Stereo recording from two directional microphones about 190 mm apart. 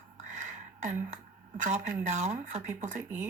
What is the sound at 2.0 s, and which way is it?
Speech, 35° right (ahead or behind).